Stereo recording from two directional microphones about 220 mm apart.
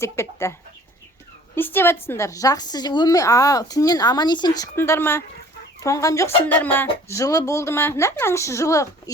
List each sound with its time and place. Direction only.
0.0 s a woman's voice: 10° left (ahead or behind)
1.5 s a woman's voice: 10° left (ahead or behind)